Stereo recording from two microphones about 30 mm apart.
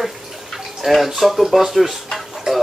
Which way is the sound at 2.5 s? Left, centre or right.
Right.